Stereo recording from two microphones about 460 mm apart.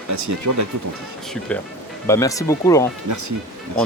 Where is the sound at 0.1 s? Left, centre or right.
Right.